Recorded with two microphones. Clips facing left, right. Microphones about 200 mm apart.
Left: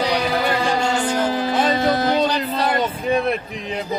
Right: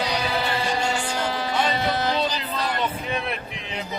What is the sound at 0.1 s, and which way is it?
Music, 50° left (ahead or behind).